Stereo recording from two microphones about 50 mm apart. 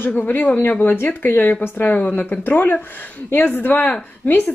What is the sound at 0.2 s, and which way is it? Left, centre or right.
A woman's voice, left.